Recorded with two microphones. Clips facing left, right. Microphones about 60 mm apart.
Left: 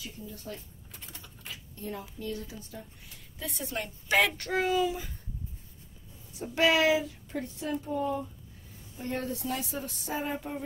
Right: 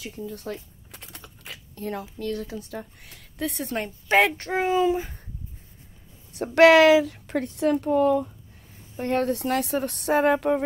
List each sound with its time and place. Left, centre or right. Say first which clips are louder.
0.0 s speech: right 8 dB; right
6.3 s a woman's voice: right 11 dB; right